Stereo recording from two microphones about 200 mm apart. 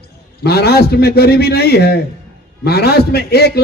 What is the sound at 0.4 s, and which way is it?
A man's voice, 55° left (ahead or behind).